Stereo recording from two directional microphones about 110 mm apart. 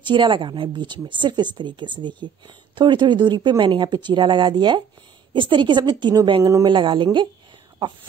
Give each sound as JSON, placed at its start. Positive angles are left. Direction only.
{"t": 0.0, "sound": "speech", "side_deg": -45}